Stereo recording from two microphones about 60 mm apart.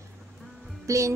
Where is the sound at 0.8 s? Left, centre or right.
Right.